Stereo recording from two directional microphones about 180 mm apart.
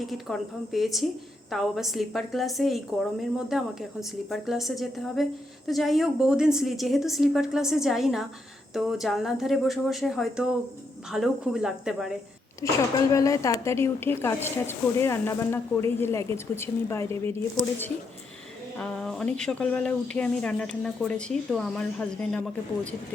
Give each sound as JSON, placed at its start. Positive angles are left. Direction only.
{"t": 0.0, "sound": "a woman's voice", "side_deg": 0}
{"t": 12.6, "sound": "a woman's voice", "side_deg": 20}